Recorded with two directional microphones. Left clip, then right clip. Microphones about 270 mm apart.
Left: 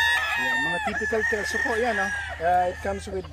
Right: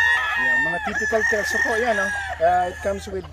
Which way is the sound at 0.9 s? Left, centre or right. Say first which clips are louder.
Right 4 dB; right.